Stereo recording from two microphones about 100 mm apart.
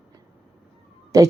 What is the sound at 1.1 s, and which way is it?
Speech, 35° right (ahead or behind).